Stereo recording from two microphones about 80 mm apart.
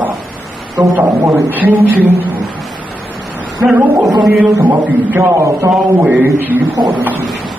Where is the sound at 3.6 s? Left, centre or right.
Centre.